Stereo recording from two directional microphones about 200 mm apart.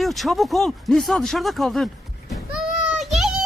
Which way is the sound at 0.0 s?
Centre (ahead or behind).